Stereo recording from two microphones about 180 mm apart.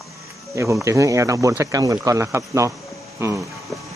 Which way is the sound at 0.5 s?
15° right (ahead or behind).